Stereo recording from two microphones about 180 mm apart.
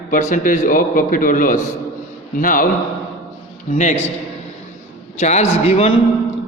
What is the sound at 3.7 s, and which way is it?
Speech, 40° left (ahead or behind).